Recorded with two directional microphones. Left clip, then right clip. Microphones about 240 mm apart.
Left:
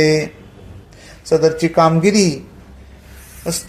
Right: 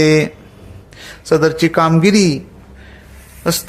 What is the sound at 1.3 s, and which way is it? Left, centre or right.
Speech, right.